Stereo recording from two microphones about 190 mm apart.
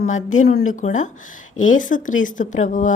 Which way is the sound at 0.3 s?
55° left (ahead or behind).